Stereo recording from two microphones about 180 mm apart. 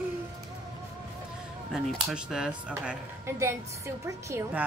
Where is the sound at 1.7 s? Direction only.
Centre (ahead or behind).